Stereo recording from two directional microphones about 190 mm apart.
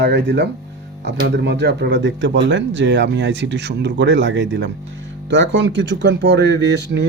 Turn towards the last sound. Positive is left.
turn(degrees=-65)  # may be behind; listen again after turning